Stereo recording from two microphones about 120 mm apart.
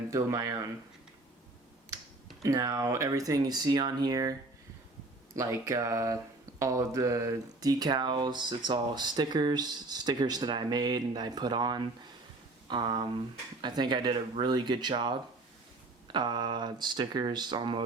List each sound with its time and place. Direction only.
0.1 s speech: 25° right (ahead or behind)
2.4 s speech: 30° right (ahead or behind)
5.4 s speech: 25° right (ahead or behind)
16.1 s speech: 40° right (ahead or behind)